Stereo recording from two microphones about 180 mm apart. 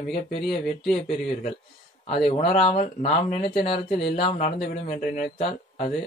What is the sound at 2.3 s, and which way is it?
Speech, 35° left (ahead or behind).